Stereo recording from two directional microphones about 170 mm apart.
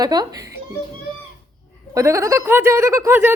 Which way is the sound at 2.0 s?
20° right (ahead or behind).